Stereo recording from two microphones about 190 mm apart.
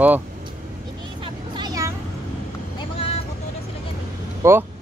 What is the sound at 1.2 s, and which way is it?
Vehicle, 25° right (ahead or behind).